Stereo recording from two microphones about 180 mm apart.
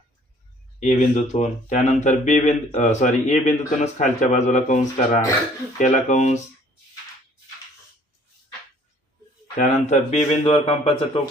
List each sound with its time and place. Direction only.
0.8 s speech: 40° left (ahead or behind)
9.6 s speech: 40° left (ahead or behind)